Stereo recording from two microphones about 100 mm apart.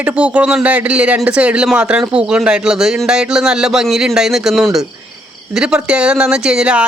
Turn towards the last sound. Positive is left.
turn(degrees=-10)  # may be behind; listen again after turning